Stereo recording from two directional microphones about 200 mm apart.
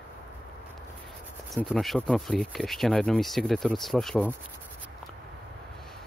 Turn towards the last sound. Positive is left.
turn(degrees=0)  # may be behind; listen again after turning